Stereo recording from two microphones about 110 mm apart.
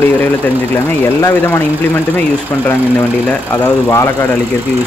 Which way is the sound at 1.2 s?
20° left (ahead or behind).